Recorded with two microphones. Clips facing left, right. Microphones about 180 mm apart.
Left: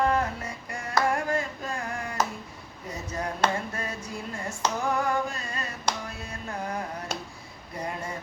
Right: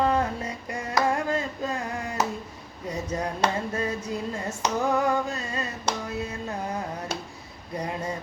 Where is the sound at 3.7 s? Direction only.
25° right (ahead or behind).